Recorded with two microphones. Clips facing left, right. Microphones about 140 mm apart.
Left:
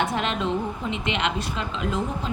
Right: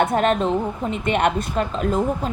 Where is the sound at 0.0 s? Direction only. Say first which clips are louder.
Right 7 dB; 50° right (ahead or behind).